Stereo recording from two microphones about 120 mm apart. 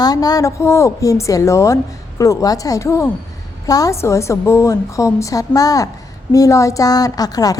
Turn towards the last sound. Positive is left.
turn(degrees=30)  # may be behind; listen again after turning